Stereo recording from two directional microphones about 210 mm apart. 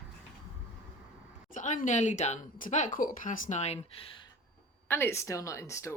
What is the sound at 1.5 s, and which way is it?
Speech, 35° left (ahead or behind).